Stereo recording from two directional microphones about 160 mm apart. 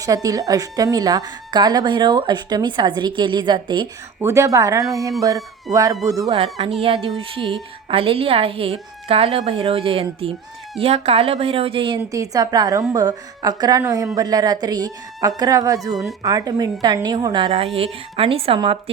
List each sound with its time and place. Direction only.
0.0 s a woman's voice: 20° right (ahead or behind)
4.2 s a woman's voice: 15° right (ahead or behind)
6.3 s a woman's voice: 40° right (ahead or behind)
12.0 s a woman's voice: 20° right (ahead or behind)
15.9 s speech: centre (ahead or behind)
16.2 s a woman's voice: 25° right (ahead or behind)